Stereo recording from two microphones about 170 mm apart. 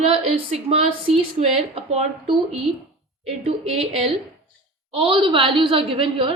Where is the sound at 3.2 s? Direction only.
35° right (ahead or behind).